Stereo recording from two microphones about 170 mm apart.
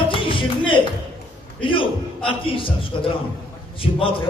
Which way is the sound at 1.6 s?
30° left (ahead or behind).